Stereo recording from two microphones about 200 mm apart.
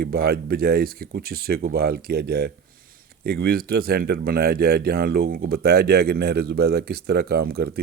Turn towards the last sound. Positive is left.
turn(degrees=-50)  # may be behind; listen again after turning